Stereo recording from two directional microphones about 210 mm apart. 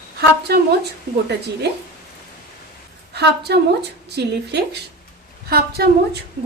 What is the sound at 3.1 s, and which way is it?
A woman's voice, 50° right (ahead or behind).